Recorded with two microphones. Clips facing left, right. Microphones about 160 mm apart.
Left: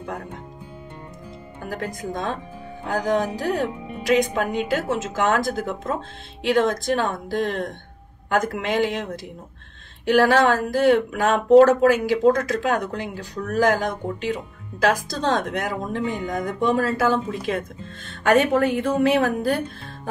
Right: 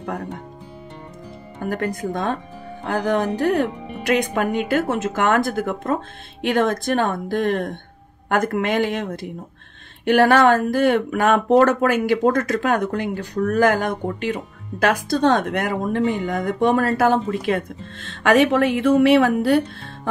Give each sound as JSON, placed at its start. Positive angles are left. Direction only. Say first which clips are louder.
{"t": 1.7, "sound": "speech", "louder": "right 5 dB", "side_deg": -55}